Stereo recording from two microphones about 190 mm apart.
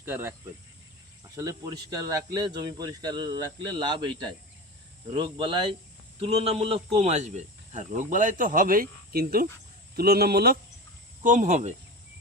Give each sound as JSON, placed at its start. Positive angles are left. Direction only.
{"t": 0.1, "sound": "speech", "side_deg": -10}
{"t": 11.2, "sound": "speech", "side_deg": -40}